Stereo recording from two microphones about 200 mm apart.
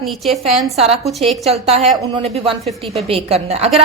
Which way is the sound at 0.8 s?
30° right (ahead or behind).